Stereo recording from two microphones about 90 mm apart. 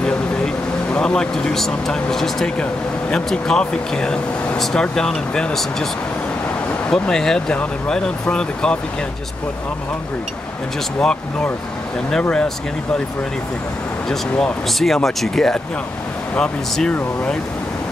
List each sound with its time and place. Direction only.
0.9 s speech: 10° left (ahead or behind)
6.9 s speech: 5° left (ahead or behind)
11.0 s speech: 10° left (ahead or behind)
14.8 s speech: 5° left (ahead or behind)